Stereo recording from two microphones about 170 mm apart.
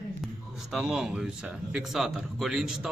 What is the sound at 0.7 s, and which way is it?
Speech, 5° right (ahead or behind).